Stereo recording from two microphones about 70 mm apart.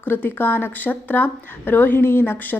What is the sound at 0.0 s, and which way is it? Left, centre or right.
A woman's voice, left.